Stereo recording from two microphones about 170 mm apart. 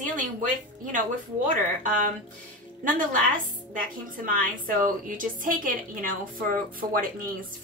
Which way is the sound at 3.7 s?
55° right (ahead or behind).